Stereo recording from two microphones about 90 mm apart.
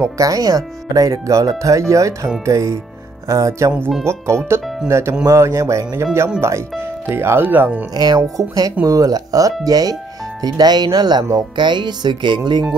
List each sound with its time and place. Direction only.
0.0 s speech: 40° right (ahead or behind); by 7.8 s 20° right (ahead or behind)
7.9 s speech: 45° right (ahead or behind)
11.3 s music: 60° right (ahead or behind)